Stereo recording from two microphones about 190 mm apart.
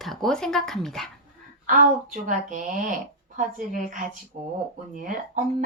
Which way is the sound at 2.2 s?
45° right (ahead or behind).